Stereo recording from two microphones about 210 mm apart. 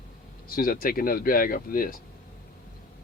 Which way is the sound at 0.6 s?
45° left (ahead or behind).